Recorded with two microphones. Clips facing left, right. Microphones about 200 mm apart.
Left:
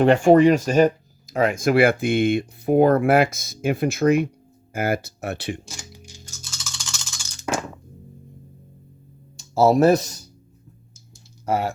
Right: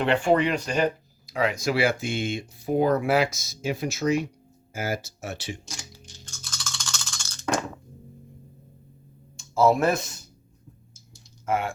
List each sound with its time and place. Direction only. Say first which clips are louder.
0.0 s speech: left 8 dB; 45° left (ahead or behind); by 5.5 s 60° left (ahead or behind)
5.6 s music: left 2 dB; 10° left (ahead or behind)
9.4 s speech: left 5 dB; 35° left (ahead or behind)
11.4 s speech: left 3 dB; 40° left (ahead or behind)